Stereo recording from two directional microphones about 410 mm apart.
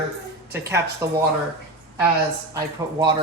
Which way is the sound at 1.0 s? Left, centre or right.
Centre.